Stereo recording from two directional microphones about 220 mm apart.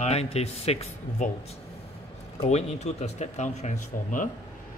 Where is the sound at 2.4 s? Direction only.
30° left (ahead or behind).